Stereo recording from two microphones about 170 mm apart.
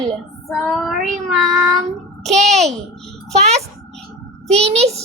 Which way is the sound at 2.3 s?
40° right (ahead or behind).